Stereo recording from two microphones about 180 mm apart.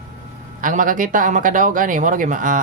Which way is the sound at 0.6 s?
50° right (ahead or behind).